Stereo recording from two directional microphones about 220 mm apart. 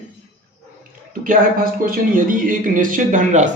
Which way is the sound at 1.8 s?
40° right (ahead or behind).